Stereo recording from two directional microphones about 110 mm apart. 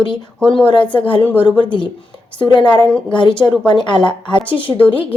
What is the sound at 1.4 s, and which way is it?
Speech, 50° left (ahead or behind).